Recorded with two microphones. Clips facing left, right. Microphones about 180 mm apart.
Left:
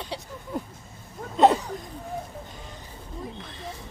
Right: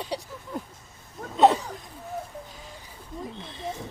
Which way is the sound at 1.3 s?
Centre (ahead or behind).